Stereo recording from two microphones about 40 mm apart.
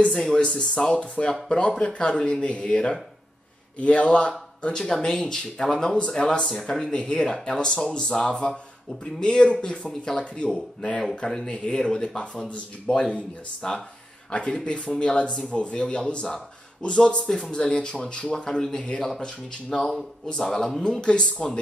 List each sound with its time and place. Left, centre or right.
0.3 s speech: left
4.7 s speech: centre
6.4 s speech: centre
12.4 s speech: left
13.6 s speech: centre
14.3 s speech: left
20.8 s speech: left